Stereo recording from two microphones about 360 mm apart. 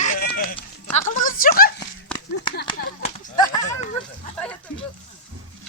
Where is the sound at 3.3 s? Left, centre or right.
Centre.